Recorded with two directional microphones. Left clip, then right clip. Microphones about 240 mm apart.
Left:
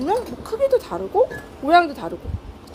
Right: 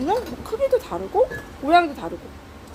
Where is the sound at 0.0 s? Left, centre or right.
Centre.